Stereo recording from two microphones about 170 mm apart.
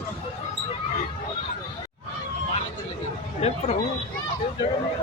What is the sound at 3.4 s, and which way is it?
Speech, 40° left (ahead or behind).